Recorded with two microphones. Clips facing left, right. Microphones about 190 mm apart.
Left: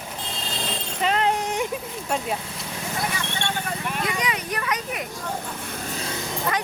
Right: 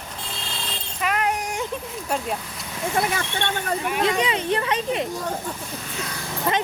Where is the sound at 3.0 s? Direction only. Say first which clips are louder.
Right 6 dB; 60° right (ahead or behind).